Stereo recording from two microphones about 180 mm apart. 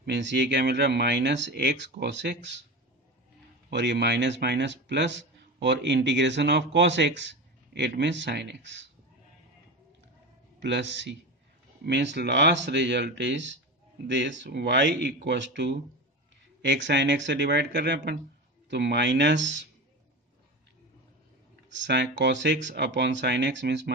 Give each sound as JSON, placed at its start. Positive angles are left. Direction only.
{"t": 0.0, "sound": "a man's voice", "side_deg": -75}
{"t": 3.7, "sound": "a man's voice", "side_deg": -70}
{"t": 10.6, "sound": "a man's voice", "side_deg": -80}
{"t": 21.6, "sound": "speech", "side_deg": -85}